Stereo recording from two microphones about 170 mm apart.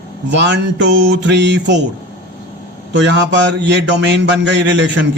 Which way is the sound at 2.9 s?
90° right.